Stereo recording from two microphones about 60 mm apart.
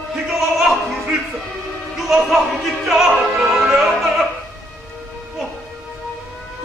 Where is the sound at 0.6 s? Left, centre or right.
Centre.